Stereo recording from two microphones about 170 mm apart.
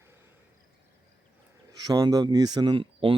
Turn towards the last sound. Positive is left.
turn(degrees=-30)  # may be behind; listen again after turning